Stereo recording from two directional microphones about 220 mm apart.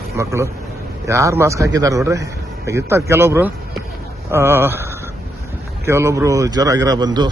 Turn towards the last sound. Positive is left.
turn(degrees=-20)  # may be behind; listen again after turning